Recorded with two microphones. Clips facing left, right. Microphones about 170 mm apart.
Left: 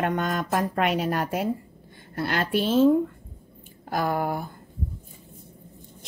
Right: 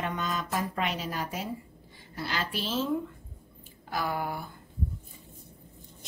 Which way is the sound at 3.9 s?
50° left (ahead or behind).